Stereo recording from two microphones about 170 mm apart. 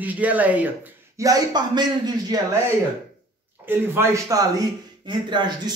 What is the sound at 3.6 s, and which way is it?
Speech, 15° right (ahead or behind).